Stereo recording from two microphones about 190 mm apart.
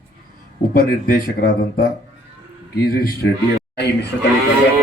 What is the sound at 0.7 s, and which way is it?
Speech, 50° left (ahead or behind).